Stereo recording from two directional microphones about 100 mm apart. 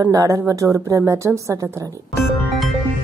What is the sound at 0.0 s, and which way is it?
A woman's voice, 35° right (ahead or behind).